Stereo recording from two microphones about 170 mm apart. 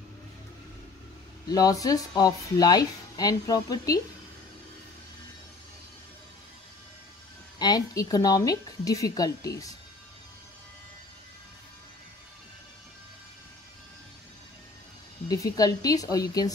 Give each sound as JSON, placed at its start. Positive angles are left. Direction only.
{"t": 1.5, "sound": "speech", "side_deg": 20}
{"t": 7.5, "sound": "speech", "side_deg": 25}
{"t": 15.2, "sound": "speech", "side_deg": 20}